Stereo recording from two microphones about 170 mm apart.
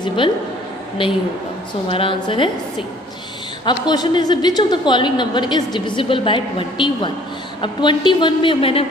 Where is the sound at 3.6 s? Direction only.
25° left (ahead or behind).